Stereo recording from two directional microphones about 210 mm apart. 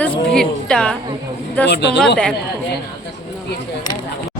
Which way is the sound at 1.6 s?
55° left (ahead or behind).